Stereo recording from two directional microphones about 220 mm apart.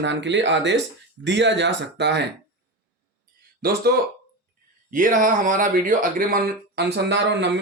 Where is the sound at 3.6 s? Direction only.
45° right (ahead or behind).